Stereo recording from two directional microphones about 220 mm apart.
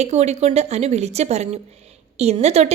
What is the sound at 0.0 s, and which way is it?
A woman's voice, 30° right (ahead or behind).